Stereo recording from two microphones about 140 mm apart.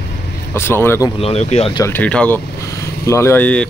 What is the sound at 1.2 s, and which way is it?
Speech, 50° left (ahead or behind).